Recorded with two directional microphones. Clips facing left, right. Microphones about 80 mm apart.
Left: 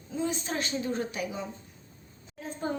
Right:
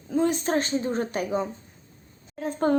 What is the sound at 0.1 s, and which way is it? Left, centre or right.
A woman's voice, right.